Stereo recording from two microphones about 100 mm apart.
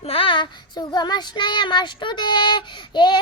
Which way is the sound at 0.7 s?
45° left (ahead or behind).